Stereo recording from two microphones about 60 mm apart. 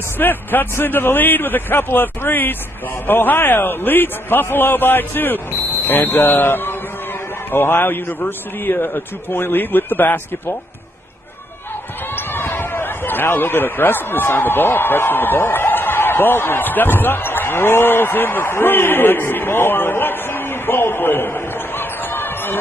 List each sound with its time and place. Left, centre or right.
0.2 s a man's voice: left
12.2 s speech: left